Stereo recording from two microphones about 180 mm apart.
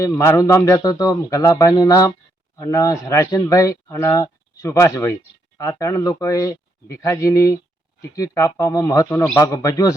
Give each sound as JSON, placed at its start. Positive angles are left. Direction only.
{"t": 0.0, "sound": "a man's voice", "side_deg": 15}